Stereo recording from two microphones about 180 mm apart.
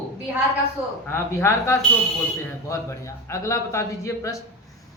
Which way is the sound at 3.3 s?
15° left (ahead or behind).